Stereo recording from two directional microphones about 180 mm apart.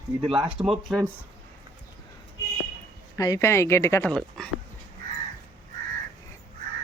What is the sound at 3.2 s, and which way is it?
Speech, 20° left (ahead or behind).